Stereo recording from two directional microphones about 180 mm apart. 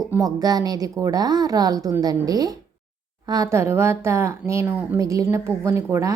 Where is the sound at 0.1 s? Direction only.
20° right (ahead or behind).